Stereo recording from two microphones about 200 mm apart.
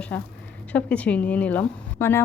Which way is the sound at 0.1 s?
5° left (ahead or behind).